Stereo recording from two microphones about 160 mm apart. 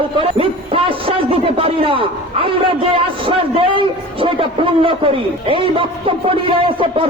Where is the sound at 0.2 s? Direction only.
35° right (ahead or behind).